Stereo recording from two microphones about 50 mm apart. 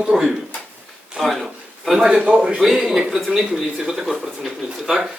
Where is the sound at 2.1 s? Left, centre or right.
Right.